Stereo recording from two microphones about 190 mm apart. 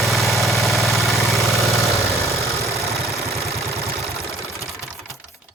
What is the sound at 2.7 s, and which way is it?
Vehicle, 15° right (ahead or behind).